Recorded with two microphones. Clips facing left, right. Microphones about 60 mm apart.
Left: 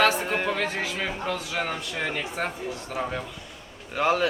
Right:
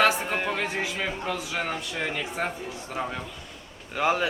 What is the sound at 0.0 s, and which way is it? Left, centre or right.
A man's voice, centre.